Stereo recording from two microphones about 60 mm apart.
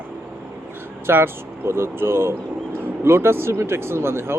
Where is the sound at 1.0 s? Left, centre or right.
Right.